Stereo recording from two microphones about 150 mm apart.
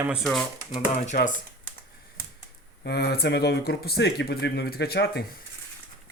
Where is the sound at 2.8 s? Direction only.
90° left.